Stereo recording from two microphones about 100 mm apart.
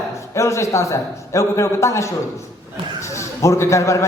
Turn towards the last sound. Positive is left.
turn(degrees=30)  # may be behind; listen again after turning